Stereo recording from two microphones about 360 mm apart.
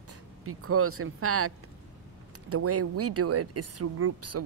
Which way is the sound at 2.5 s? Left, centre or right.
Right.